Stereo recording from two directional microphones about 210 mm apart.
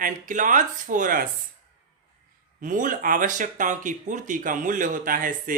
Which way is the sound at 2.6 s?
40° right (ahead or behind).